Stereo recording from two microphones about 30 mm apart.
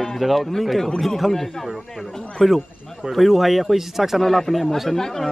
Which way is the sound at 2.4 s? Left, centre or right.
Centre.